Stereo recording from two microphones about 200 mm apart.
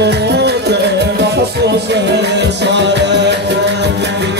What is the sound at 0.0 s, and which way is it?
Music, 55° right (ahead or behind).